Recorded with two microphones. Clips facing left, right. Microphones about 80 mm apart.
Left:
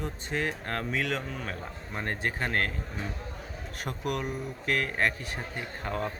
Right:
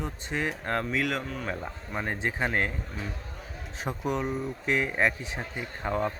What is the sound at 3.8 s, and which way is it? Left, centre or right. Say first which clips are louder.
Speech: right 3 dB; centre.